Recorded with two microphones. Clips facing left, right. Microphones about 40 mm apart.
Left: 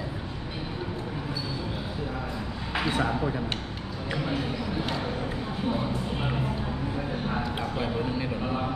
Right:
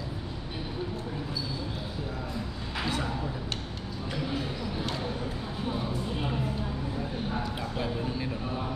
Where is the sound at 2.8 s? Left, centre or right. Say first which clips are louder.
Left 5 dB; left.